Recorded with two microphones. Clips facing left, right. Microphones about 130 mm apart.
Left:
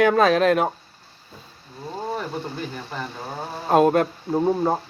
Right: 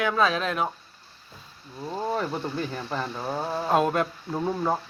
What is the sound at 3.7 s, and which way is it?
Speech, 50° left (ahead or behind).